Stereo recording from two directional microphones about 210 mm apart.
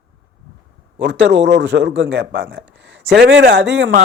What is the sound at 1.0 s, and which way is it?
A man's voice, 55° right (ahead or behind).